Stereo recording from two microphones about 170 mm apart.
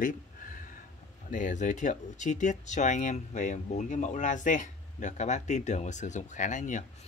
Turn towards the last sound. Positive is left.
turn(degrees=45)  # may be behind; listen again after turning